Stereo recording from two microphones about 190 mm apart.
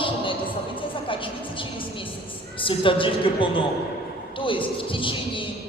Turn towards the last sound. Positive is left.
turn(degrees=25)  # may be behind; listen again after turning